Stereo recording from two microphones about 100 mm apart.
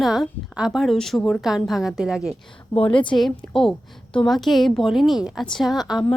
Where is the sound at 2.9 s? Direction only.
55° left (ahead or behind).